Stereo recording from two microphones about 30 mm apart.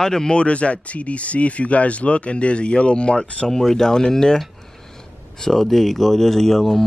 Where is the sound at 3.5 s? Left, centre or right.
Centre.